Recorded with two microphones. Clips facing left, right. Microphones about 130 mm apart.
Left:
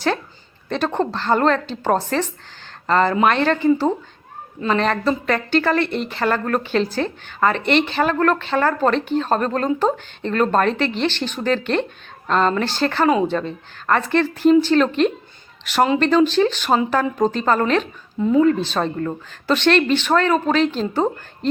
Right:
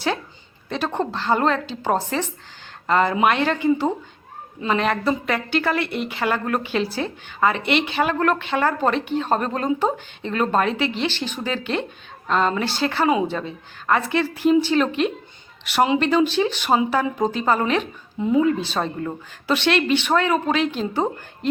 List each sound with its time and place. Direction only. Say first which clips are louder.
0.9 s speech: left 2 dB; 10° right (ahead or behind)
18.3 s speech: left 3 dB; 50° left (ahead or behind)
18.7 s speech: left 3 dB; 10° right (ahead or behind)